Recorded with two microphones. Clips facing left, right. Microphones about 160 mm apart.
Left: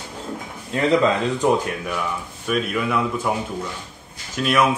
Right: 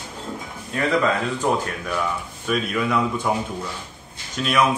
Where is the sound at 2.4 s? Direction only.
5° left (ahead or behind).